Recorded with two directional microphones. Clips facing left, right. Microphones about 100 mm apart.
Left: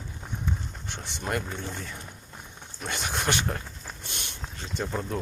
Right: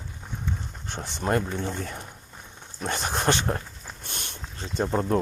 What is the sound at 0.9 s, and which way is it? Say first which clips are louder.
Speech: right 6 dB; 40° right (ahead or behind).